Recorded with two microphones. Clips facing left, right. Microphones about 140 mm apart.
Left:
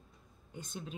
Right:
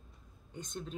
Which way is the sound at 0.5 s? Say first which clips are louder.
Right 2 dB; 5° left (ahead or behind).